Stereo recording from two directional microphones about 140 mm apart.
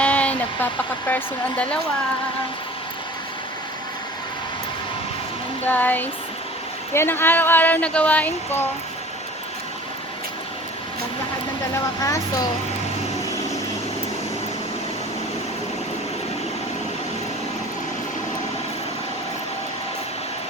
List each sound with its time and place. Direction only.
0.0 s speech: 10° left (ahead or behind)
5.6 s speech: 15° left (ahead or behind)
11.7 s speech: 25° left (ahead or behind)